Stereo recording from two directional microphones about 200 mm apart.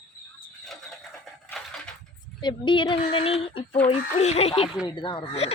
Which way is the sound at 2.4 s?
25° left (ahead or behind).